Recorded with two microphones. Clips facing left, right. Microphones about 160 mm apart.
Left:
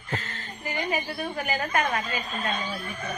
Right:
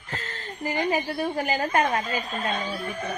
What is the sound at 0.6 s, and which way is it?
A woman's voice, 35° right (ahead or behind).